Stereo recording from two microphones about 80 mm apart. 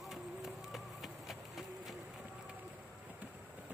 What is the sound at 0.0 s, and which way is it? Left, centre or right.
Run, centre.